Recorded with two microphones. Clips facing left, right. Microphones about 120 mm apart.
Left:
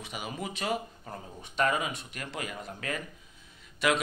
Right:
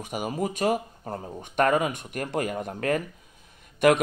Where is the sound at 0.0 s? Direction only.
45° right (ahead or behind).